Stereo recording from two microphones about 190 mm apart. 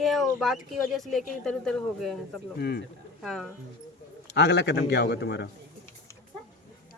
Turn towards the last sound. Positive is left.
turn(degrees=60)  # may be behind; listen again after turning